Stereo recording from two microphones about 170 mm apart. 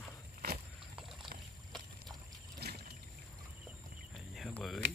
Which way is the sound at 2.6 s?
70° right (ahead or behind).